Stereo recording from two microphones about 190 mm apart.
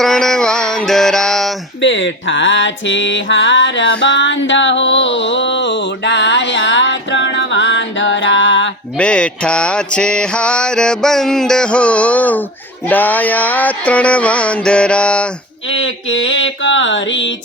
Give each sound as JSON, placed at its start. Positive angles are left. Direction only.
{"t": 0.0, "sound": "mantra", "side_deg": 0}
{"t": 1.8, "sound": "music", "side_deg": 75}
{"t": 9.0, "sound": "mantra", "side_deg": 5}
{"t": 12.9, "sound": "music", "side_deg": 10}
{"t": 15.7, "sound": "mantra", "side_deg": 90}